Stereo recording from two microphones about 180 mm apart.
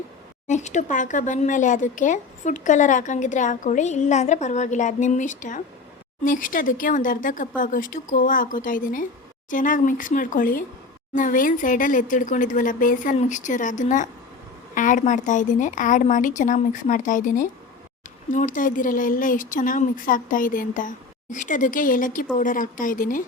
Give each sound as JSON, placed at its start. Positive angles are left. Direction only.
{"t": 0.4, "sound": "speech", "side_deg": 40}